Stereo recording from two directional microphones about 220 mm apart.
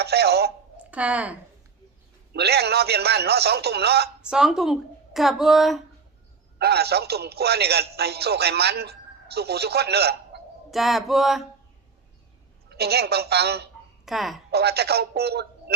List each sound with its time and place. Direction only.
0.0 s telephone: 45° right (ahead or behind)
0.9 s speech: 5° right (ahead or behind)
2.3 s speech: 50° right (ahead or behind)
4.3 s a woman's voice: 5° right (ahead or behind)
6.6 s speech: 45° right (ahead or behind)
10.7 s a woman's voice: centre (ahead or behind)
12.6 s speech: 45° right (ahead or behind)
14.0 s speech: centre (ahead or behind)
14.5 s speech: 45° right (ahead or behind)